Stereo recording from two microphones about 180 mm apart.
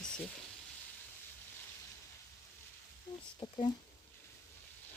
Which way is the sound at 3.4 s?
25° left (ahead or behind).